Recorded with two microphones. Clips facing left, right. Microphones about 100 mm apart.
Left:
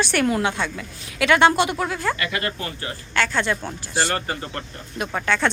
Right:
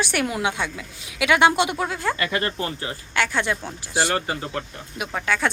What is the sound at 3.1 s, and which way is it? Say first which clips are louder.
A woman's voice: left 1 dB; 15° right (ahead or behind).